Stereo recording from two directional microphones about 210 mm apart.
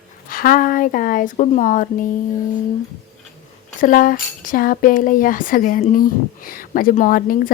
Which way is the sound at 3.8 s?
40° left (ahead or behind).